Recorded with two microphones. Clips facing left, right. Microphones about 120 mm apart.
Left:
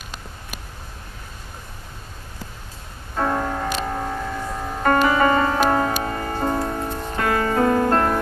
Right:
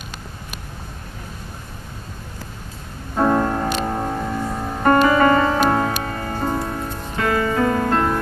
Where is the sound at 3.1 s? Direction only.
20° right (ahead or behind).